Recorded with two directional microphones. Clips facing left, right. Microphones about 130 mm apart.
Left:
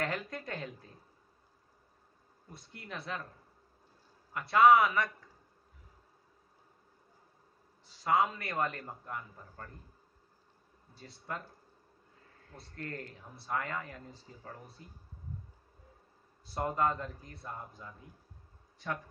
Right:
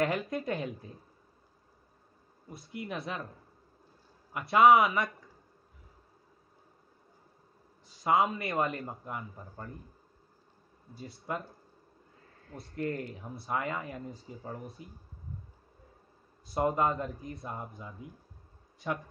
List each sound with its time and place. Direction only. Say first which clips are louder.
0.0 s speech: right 6 dB; 15° right (ahead or behind)
2.7 s speech: right 4 dB; 15° right (ahead or behind)
4.3 s speech: right 2 dB; 15° right (ahead or behind)
7.9 s speech: right 2 dB; 15° right (ahead or behind)
11.0 s speech: right 5 dB; 10° right (ahead or behind)
12.6 s speech: right 8 dB; 15° right (ahead or behind)
16.4 s speech: right 3 dB; 15° right (ahead or behind)